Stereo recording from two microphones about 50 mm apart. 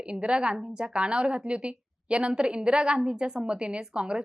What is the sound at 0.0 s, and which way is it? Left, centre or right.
A woman's voice, right.